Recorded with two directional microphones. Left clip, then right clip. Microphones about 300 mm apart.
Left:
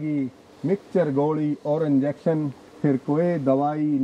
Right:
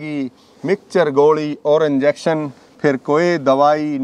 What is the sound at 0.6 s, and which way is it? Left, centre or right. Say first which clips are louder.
A man's voice: right 7 dB; centre.